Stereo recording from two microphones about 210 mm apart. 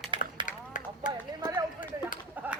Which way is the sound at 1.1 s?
15° right (ahead or behind).